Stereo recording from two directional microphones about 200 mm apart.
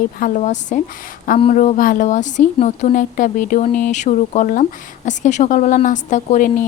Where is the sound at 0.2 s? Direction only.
40° left (ahead or behind).